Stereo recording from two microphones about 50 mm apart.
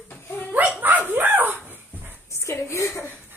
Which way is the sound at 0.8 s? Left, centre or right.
Right.